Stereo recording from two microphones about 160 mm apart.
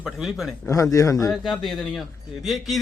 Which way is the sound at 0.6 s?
20° left (ahead or behind).